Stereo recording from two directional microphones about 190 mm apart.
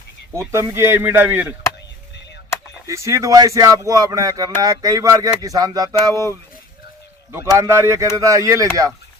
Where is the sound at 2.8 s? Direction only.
15° right (ahead or behind).